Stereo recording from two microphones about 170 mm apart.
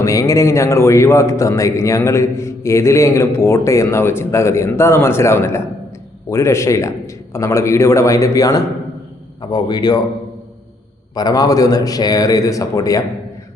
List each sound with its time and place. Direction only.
0.0 s a man's voice: 20° left (ahead or behind)
11.1 s speech: 20° left (ahead or behind)